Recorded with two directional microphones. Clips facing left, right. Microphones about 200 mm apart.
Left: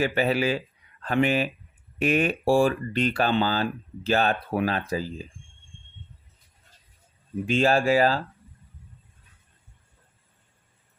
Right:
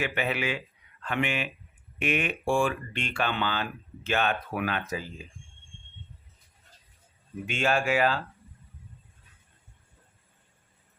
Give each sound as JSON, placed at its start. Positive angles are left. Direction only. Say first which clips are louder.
{"t": 0.0, "sound": "speech", "louder": "left 6 dB", "side_deg": 35}
{"t": 7.4, "sound": "speech", "louder": "left 6 dB", "side_deg": 35}